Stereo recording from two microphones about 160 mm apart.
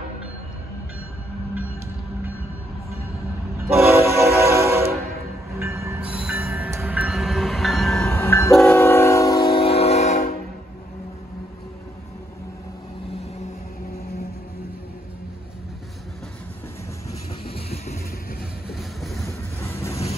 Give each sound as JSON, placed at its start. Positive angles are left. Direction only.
{"t": 3.6, "sound": "train", "side_deg": -15}
{"t": 8.0, "sound": "train", "side_deg": 15}
{"t": 18.8, "sound": "music", "side_deg": 0}
{"t": 19.2, "sound": "vehicle", "side_deg": 15}